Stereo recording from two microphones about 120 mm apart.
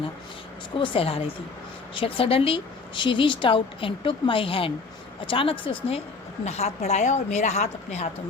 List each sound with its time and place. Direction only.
0.8 s speech: 50° left (ahead or behind)
6.4 s a woman's voice: 65° left (ahead or behind)